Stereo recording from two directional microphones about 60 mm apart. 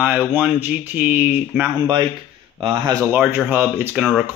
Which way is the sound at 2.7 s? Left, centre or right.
Right.